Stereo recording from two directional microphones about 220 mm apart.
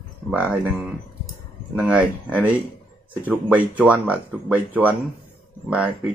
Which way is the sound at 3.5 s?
5° right (ahead or behind).